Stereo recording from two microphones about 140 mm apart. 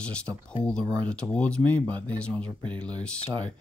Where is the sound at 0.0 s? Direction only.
5° left (ahead or behind).